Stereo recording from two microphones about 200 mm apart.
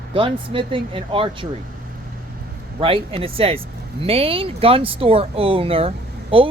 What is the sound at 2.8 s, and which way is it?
Speech, 25° right (ahead or behind).